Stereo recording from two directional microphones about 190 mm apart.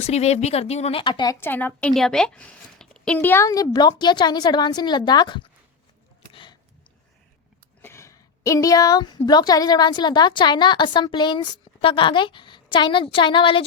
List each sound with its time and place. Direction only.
0.0 s a woman's voice: 35° left (ahead or behind)
6.3 s a sound: 25° left (ahead or behind)
7.8 s a woman's voice: 15° left (ahead or behind)